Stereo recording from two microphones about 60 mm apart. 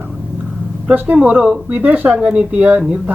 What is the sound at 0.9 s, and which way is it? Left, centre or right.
Speech, right.